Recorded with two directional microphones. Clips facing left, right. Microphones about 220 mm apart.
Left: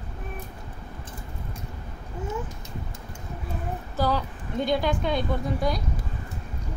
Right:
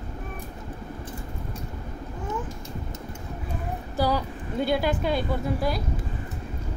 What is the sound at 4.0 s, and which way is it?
A woman's voice, 10° right (ahead or behind).